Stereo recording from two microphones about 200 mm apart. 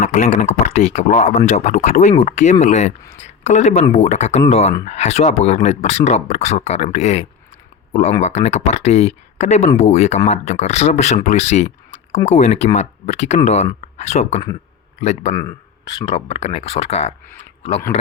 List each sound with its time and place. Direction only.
0.0 s speech: 40° left (ahead or behind)
15.4 s a sound: 20° left (ahead or behind)
16.1 s speech: 30° left (ahead or behind)